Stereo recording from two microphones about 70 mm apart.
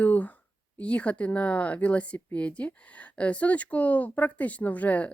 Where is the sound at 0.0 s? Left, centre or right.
Left.